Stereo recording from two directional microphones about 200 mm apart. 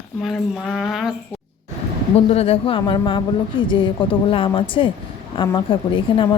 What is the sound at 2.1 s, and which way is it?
Speech, 30° left (ahead or behind).